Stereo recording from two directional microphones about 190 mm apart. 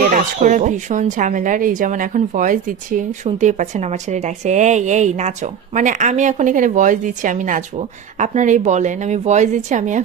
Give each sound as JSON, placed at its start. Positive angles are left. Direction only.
{"t": 0.1, "sound": "speech", "side_deg": -40}